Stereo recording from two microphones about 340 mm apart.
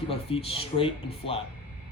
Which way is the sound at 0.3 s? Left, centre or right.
Centre.